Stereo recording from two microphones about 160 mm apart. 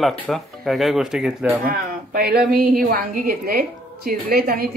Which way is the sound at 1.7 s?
70° right (ahead or behind).